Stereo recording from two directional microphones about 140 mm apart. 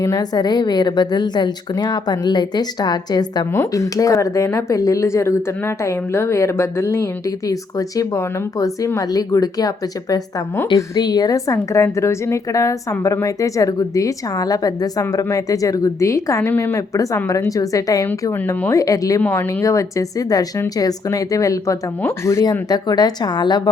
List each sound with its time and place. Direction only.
0.0 s a woman's voice: 25° left (ahead or behind)